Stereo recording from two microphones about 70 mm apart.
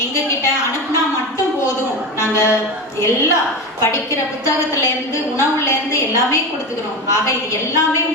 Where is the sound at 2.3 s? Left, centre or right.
Left.